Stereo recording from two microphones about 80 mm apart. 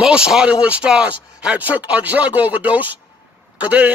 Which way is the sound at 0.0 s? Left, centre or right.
Centre.